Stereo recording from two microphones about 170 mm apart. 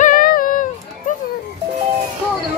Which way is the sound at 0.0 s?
55° left (ahead or behind).